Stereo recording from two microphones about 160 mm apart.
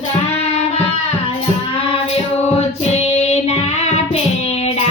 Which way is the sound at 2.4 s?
40° left (ahead or behind).